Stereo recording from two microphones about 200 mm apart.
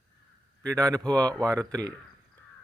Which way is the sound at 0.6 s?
15° right (ahead or behind).